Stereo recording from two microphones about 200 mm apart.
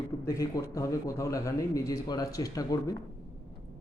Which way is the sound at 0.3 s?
15° left (ahead or behind).